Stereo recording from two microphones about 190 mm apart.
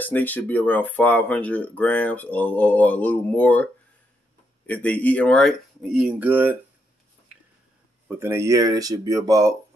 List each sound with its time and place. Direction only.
0.0 s speech: 10° left (ahead or behind)
4.6 s speech: 10° left (ahead or behind); by 6.6 s 10° right (ahead or behind)
7.3 s a sound: 5° right (ahead or behind)
8.1 s speech: 15° right (ahead or behind)